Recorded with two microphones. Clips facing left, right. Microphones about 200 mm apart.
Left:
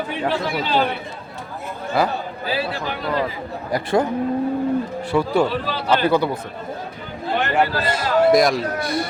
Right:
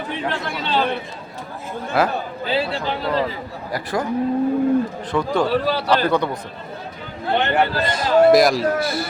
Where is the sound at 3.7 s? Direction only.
25° left (ahead or behind).